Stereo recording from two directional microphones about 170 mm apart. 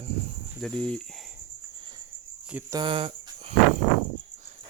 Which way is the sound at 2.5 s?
10° right (ahead or behind).